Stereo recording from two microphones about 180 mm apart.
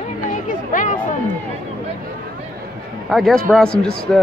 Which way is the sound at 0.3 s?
45° left (ahead or behind).